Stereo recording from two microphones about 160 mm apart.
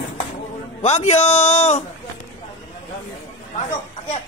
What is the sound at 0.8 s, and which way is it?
A man's voice, 45° left (ahead or behind).